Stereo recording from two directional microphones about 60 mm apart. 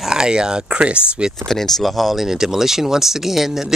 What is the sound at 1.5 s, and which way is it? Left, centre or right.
Speech, centre.